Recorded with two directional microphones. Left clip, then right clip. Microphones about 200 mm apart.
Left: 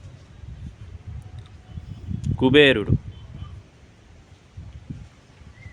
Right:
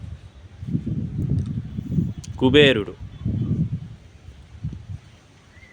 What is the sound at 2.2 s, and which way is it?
Speech, centre (ahead or behind).